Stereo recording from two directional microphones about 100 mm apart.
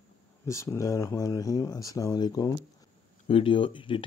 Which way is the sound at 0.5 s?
30° left (ahead or behind).